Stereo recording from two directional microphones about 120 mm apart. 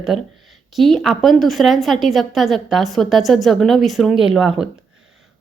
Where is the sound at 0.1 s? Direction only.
Centre (ahead or behind).